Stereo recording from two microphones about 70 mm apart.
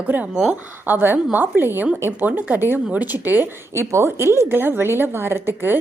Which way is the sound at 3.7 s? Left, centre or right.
Right.